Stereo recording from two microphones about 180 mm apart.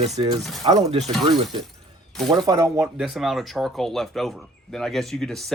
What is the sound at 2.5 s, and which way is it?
Speech, 20° right (ahead or behind).